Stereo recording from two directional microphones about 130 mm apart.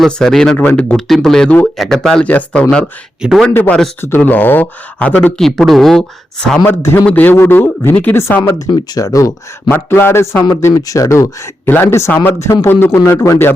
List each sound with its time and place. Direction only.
0.0 s a man's voice: 5° left (ahead or behind)
3.2 s a man's voice: 5° right (ahead or behind)
3.5 s speech: 15° left (ahead or behind)
6.7 s speech: 15° left (ahead or behind)
8.4 s speech: 25° left (ahead or behind)